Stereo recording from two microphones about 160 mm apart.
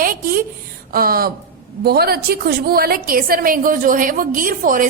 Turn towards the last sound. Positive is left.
turn(degrees=-60)  # may be behind; listen again after turning